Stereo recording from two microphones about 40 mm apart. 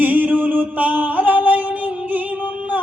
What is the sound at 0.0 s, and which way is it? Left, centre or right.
Music, right.